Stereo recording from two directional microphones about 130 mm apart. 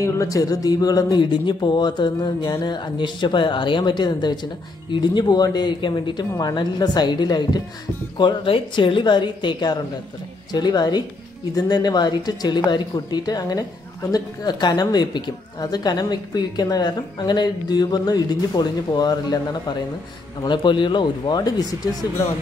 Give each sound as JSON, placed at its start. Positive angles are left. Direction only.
{"t": 0.0, "sound": "speech", "side_deg": 25}